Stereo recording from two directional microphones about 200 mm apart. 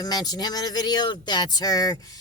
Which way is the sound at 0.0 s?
20° left (ahead or behind).